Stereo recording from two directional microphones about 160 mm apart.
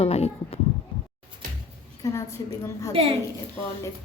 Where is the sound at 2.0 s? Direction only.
20° left (ahead or behind).